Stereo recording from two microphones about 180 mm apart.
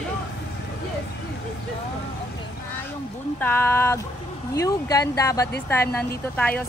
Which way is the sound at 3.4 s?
10° left (ahead or behind).